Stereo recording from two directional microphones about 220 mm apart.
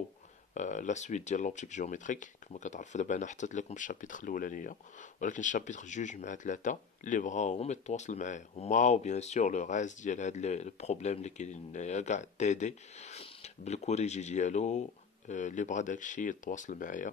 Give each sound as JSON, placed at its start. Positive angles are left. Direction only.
{"t": 0.6, "sound": "speech", "side_deg": 35}